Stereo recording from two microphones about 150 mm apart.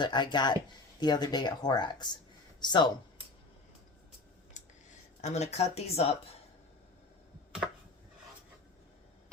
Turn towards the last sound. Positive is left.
turn(degrees=-5)  # may be behind; listen again after turning